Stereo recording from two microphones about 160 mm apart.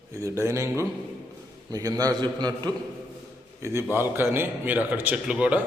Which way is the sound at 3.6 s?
15° right (ahead or behind).